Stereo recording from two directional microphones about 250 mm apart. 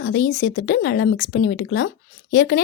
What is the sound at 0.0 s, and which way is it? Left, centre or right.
Speech, left.